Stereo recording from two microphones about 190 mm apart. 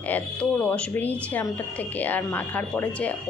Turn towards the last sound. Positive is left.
turn(degrees=5)  # may be behind; listen again after turning